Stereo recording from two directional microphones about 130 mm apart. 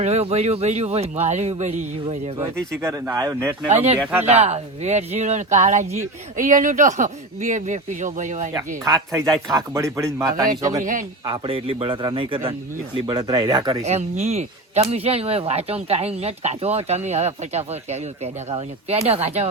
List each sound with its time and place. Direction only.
0.0 s speech: 55° right (ahead or behind)
2.8 s speech: 25° right (ahead or behind)
3.7 s speech: 55° right (ahead or behind)
6.3 s speech: 85° right; by 8.4 s 70° right (ahead or behind)
8.5 s speech: 25° right (ahead or behind)
11.3 s a man's voice: 45° right (ahead or behind)
13.1 s speech: 30° right (ahead or behind)
13.8 s a man's voice: 55° right (ahead or behind)